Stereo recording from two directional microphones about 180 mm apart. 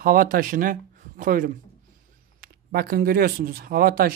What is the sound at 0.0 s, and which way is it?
Speech, 50° right (ahead or behind).